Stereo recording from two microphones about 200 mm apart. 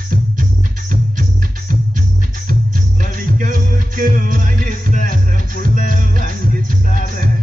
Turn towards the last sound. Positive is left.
turn(degrees=-40)  # may be behind; listen again after turning